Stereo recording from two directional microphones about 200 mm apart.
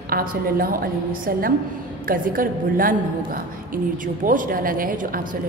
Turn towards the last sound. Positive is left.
turn(degrees=-45)  # may be behind; listen again after turning